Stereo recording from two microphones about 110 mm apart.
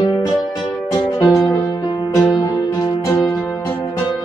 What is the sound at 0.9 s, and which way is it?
Music, 40° left (ahead or behind).